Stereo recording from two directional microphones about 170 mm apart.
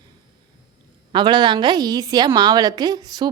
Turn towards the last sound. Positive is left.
turn(degrees=-20)  # may be behind; listen again after turning